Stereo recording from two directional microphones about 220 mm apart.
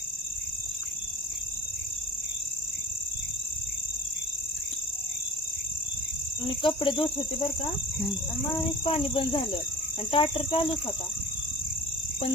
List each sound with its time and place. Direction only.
6.6 s speech: 20° left (ahead or behind)
8.8 s speech: 25° left (ahead or behind)